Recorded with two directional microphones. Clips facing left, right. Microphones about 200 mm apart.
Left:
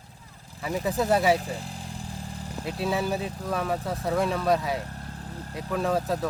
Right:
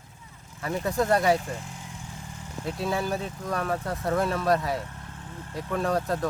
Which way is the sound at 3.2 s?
35° left (ahead or behind).